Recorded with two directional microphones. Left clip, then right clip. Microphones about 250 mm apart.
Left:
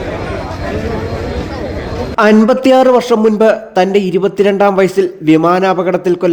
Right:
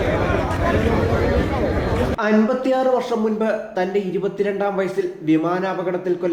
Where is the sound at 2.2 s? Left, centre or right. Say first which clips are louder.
Left 13 dB; left.